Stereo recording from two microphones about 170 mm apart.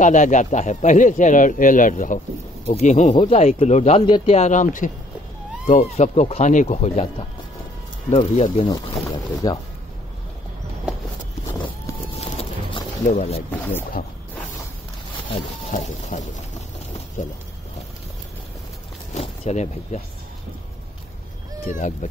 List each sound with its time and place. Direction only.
0.0 s speech: 45° left (ahead or behind)
4.4 s speech: 45° left (ahead or behind)
8.1 s speech: 40° left (ahead or behind)
8.6 s speech: 25° left (ahead or behind)
12.4 s a sound: 40° left (ahead or behind)
15.7 s speech: 45° left (ahead or behind)
19.1 s speech: 40° left (ahead or behind)
21.6 s speech: 50° left (ahead or behind)